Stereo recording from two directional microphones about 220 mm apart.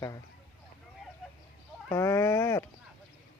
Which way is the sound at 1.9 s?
10° left (ahead or behind).